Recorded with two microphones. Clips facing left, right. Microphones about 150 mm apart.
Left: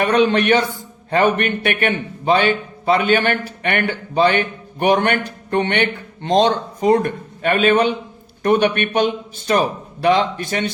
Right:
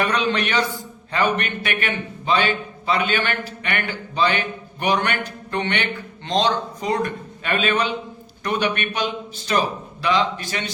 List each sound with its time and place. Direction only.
0.0 s a man's voice: 50° left (ahead or behind)